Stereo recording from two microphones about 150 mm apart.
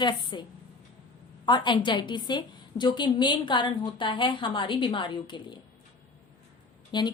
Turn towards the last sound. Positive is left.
turn(degrees=30)  # may be behind; listen again after turning